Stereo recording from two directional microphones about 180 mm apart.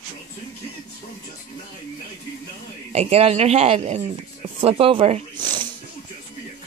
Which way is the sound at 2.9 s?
35° right (ahead or behind).